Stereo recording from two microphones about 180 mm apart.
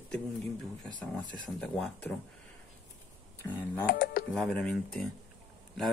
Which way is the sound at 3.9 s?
55° left (ahead or behind).